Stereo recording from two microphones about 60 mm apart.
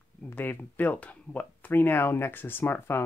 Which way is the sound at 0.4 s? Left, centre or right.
Left.